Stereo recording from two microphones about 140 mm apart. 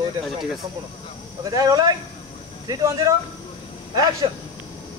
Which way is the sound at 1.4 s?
25° right (ahead or behind).